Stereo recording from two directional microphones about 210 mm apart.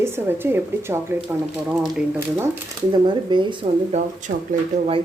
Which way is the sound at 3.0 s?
20° right (ahead or behind).